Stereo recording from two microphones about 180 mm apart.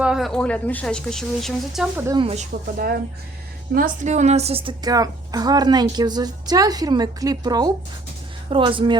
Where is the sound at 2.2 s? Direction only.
40° right (ahead or behind).